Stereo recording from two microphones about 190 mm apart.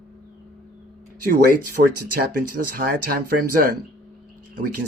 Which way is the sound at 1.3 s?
50° right (ahead or behind).